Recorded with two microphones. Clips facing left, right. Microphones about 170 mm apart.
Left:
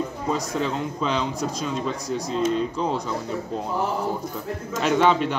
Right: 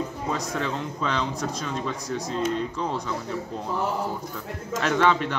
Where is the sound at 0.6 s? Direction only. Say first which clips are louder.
Left 3 dB; 15° left (ahead or behind).